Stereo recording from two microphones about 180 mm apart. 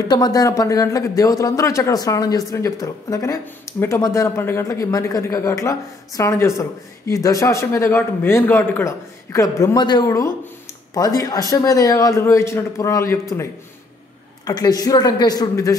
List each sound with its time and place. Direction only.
0.1 s speech: 20° left (ahead or behind)